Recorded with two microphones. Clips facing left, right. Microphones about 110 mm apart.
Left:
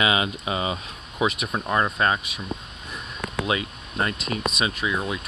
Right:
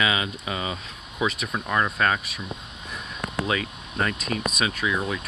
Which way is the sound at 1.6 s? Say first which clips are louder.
Left 1 dB; 20° left (ahead or behind).